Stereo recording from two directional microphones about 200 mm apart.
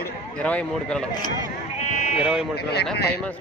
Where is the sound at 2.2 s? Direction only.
Centre (ahead or behind).